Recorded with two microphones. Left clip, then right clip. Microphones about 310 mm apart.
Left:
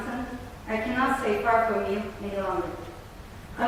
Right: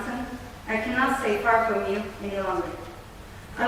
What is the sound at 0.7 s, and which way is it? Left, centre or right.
A woman's voice, centre.